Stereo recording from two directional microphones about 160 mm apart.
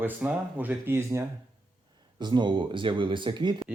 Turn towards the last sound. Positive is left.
turn(degrees=-30)  # may be behind; listen again after turning